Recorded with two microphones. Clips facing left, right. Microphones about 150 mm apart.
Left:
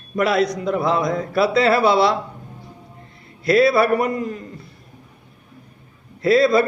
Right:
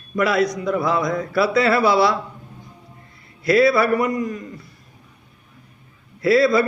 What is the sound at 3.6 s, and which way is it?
Speech, 55° left (ahead or behind).